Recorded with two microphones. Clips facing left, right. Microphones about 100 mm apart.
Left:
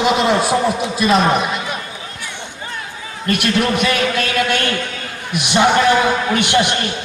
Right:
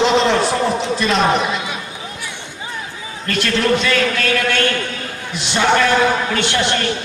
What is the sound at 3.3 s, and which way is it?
A man's voice, 15° left (ahead or behind).